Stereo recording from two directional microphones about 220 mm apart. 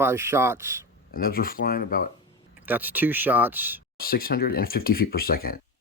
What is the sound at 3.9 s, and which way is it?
Speech, 40° left (ahead or behind).